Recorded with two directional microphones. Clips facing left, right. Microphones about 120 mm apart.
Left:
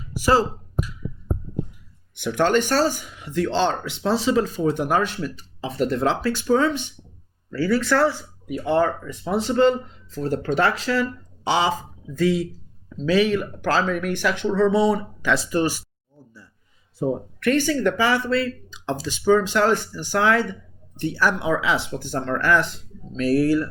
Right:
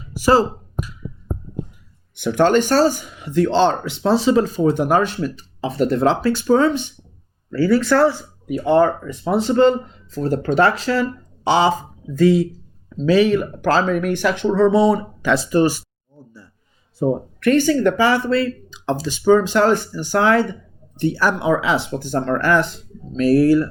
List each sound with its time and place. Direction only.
0.2 s speech: 30° right (ahead or behind)
2.1 s speech: 35° right (ahead or behind)
17.0 s speech: 40° right (ahead or behind)